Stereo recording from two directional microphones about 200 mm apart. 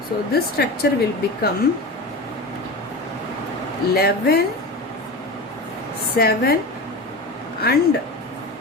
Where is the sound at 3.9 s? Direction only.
50° left (ahead or behind).